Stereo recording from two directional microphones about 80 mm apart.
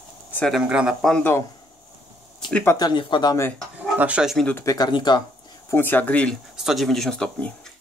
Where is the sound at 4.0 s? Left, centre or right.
Centre.